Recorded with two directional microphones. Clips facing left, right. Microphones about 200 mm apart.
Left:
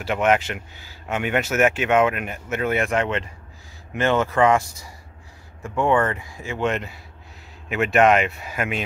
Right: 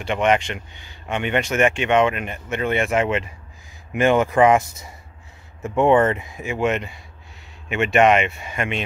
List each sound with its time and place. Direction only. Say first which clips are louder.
0.0 s speech: right 1 dB; 5° left (ahead or behind); by 6.7 s 15° right (ahead or behind)
6.7 s speech: right 2 dB; centre (ahead or behind)